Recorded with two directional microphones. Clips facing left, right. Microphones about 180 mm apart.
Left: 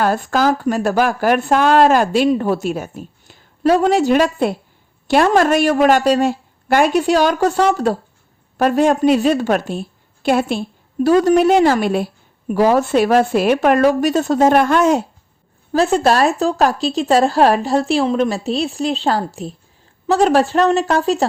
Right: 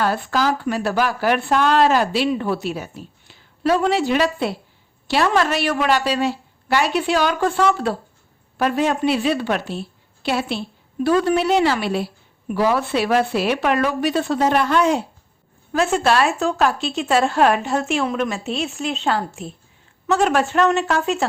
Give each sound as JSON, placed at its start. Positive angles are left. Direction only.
{"t": 0.0, "sound": "speech", "side_deg": 45}